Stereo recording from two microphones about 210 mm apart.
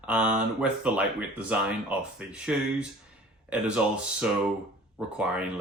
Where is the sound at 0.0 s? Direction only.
5° right (ahead or behind).